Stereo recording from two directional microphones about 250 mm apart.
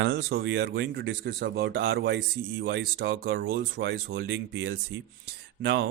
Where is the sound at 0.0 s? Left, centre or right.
Right.